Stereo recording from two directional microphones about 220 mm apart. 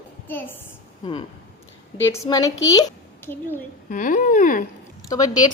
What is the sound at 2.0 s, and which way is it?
Speech, 15° left (ahead or behind).